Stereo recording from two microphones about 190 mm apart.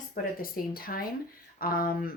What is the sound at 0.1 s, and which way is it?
Speech, 50° left (ahead or behind).